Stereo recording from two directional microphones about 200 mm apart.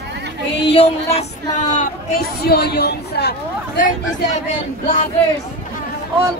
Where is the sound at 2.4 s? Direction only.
55° left (ahead or behind).